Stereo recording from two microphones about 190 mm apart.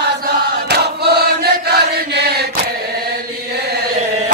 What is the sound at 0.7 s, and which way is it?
Chant, 60° right (ahead or behind).